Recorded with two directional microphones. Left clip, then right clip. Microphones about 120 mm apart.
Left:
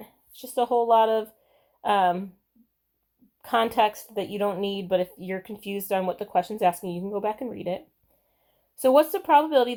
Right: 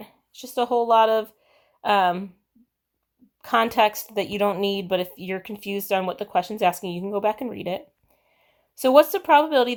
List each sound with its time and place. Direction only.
0.0 s speech: 25° right (ahead or behind)
3.4 s speech: 25° right (ahead or behind)
8.8 s speech: 30° right (ahead or behind)